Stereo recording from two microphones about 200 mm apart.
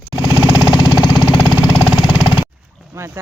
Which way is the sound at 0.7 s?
20° left (ahead or behind).